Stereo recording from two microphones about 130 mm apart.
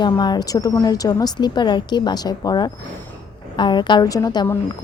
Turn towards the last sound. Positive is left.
turn(degrees=30)  # may be behind; listen again after turning